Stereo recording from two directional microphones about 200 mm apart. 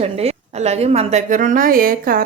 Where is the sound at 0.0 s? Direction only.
30° right (ahead or behind).